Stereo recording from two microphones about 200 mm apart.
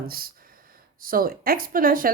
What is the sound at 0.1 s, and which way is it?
Speech, 45° right (ahead or behind).